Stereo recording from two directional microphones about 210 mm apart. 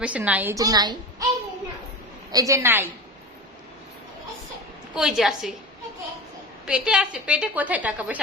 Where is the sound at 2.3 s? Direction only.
15° right (ahead or behind).